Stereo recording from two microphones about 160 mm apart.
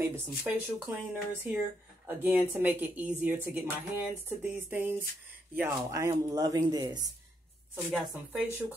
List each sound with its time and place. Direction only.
0.0 s speech: 15° right (ahead or behind)
7.7 s speech: 10° right (ahead or behind)